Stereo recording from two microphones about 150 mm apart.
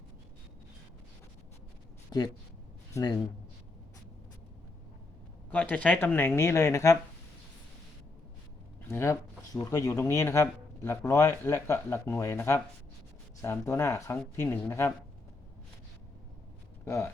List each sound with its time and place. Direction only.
2.9 s a man's voice: 25° left (ahead or behind)
5.5 s speech: 10° left (ahead or behind)
8.9 s speech: 20° left (ahead or behind)
16.8 s speech: 15° left (ahead or behind)